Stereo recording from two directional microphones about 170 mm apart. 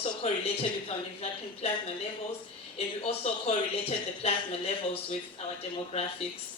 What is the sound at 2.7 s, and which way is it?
Speech, 35° left (ahead or behind).